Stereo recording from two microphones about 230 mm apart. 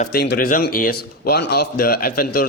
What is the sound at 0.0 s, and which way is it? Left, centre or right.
Speech, left.